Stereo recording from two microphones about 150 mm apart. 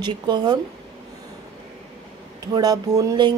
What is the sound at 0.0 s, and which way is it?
Speech, 30° right (ahead or behind).